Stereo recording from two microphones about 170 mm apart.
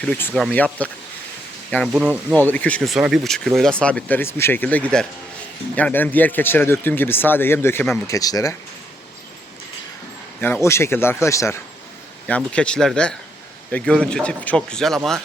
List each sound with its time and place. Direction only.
0.0 s speech: 10° left (ahead or behind)
1.9 s speech: 5° right (ahead or behind)
2.3 s speech: 10° left (ahead or behind)
10.4 s speech: 15° left (ahead or behind)
12.5 s speech: 5° left (ahead or behind)